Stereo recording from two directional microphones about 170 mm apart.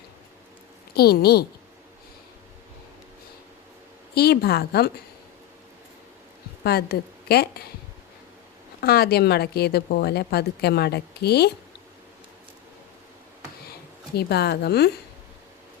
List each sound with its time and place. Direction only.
0.9 s a woman's voice: 65° left (ahead or behind)
4.1 s a woman's voice: 70° left (ahead or behind)
6.7 s a woman's voice: 70° left (ahead or behind)
8.8 s a woman's voice: 65° left (ahead or behind)
14.2 s a woman's voice: 70° left (ahead or behind)